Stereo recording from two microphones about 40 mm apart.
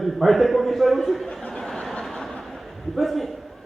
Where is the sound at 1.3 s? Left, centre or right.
Centre.